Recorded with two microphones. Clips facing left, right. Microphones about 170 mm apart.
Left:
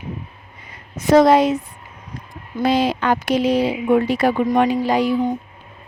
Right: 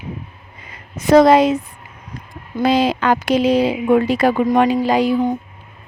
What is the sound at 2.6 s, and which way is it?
A woman's voice, 90° right.